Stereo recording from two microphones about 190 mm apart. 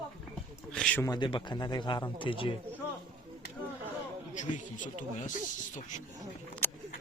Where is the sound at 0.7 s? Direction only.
5° left (ahead or behind).